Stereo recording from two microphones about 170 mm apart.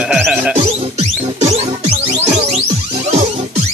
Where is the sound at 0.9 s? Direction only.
35° right (ahead or behind).